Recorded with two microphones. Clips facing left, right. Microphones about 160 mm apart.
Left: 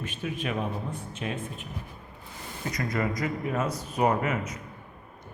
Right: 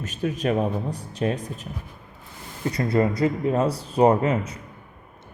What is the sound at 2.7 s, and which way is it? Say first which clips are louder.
A man's voice: right 8 dB; 30° right (ahead or behind).